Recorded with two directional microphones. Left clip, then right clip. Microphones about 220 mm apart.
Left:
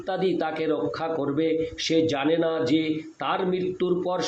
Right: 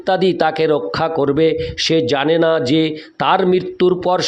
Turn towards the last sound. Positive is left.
turn(degrees=-50)  # may be behind; listen again after turning